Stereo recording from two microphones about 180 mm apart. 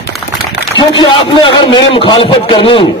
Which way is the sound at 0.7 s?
25° left (ahead or behind).